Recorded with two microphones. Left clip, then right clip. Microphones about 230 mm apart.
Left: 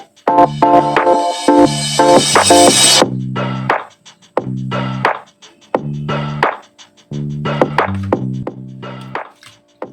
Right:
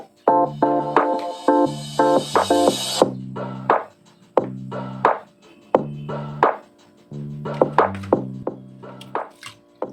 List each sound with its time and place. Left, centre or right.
0.3 s music: left